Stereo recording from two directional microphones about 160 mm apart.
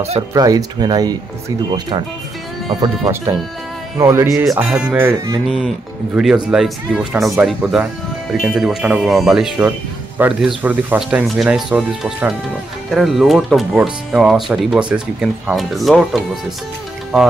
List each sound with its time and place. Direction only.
0.3 s speech: 20° right (ahead or behind)
2.8 s speech: 15° right (ahead or behind)
4.5 s speech: 5° right (ahead or behind)
6.1 s speech: 5° right (ahead or behind)
9.6 s speech: 10° right (ahead or behind)